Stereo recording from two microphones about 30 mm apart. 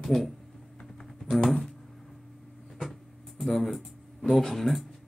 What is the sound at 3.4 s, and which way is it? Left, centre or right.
Speech, centre.